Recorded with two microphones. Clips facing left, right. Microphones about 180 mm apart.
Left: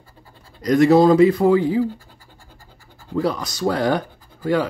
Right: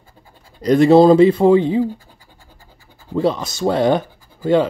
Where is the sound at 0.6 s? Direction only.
30° right (ahead or behind).